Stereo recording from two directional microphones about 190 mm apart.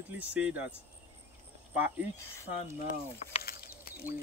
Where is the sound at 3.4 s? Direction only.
55° left (ahead or behind).